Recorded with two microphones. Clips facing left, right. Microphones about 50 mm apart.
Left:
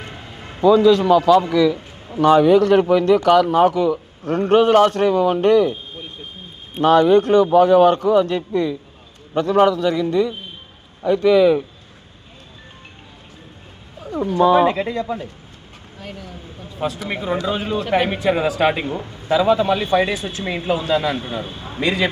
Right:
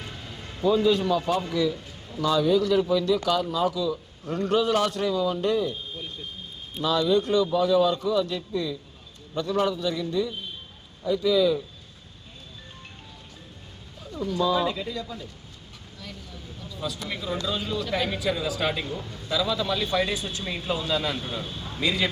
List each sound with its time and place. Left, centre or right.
0.0 s a sound: left
0.6 s a man's voice: left
6.8 s a man's voice: left
14.0 s a man's voice: left
16.1 s a sound: left
16.6 s a sound: left
17.1 s speech: left
21.2 s a man's voice: left
21.8 s a man's voice: left